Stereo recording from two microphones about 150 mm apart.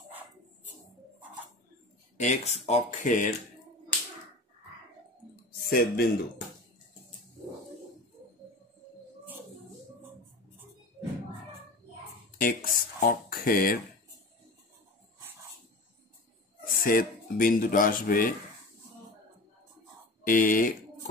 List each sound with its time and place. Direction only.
2.1 s speech: 50° left (ahead or behind)
5.3 s clicking: 85° left
12.4 s speech: 70° left (ahead or behind)
16.8 s speech: 70° left (ahead or behind)
20.2 s speech: 65° left (ahead or behind)